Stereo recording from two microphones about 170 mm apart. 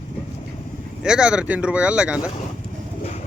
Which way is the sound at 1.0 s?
5° right (ahead or behind).